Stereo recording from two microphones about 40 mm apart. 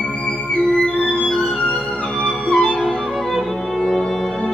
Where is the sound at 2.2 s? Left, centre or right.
Centre.